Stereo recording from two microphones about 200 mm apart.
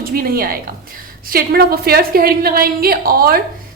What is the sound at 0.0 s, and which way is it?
A woman's voice, 50° right (ahead or behind).